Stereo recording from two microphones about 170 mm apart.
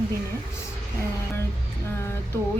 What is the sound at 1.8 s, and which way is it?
Speech, 15° left (ahead or behind).